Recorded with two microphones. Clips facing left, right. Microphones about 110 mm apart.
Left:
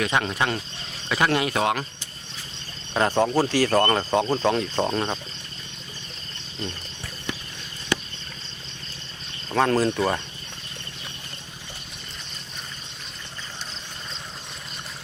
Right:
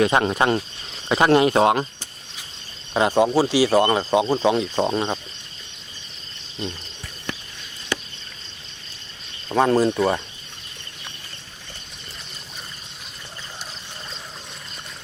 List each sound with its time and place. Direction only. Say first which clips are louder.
0.0 s speech: right 6 dB; 30° right (ahead or behind)
2.9 s speech: right 3 dB; 10° right (ahead or behind)
9.5 s speech: right 3 dB; 10° right (ahead or behind)